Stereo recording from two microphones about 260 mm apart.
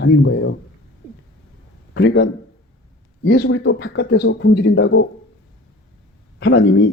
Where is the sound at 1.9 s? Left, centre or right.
Left.